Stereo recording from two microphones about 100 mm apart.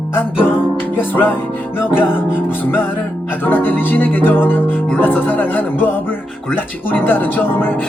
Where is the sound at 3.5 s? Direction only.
20° left (ahead or behind).